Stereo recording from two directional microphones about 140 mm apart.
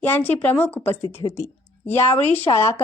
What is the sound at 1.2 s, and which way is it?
Speech, 25° left (ahead or behind).